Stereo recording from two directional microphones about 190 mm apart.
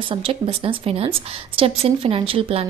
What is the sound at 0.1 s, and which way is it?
A woman's voice, 30° right (ahead or behind).